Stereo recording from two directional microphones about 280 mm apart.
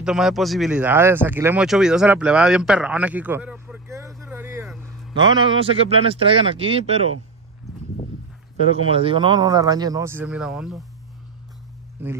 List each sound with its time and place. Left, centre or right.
0.0 s a man's voice: centre
8.9 s speech: centre
12.0 s speech: centre